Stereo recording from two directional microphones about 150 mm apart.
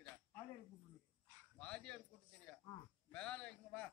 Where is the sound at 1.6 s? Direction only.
5° left (ahead or behind).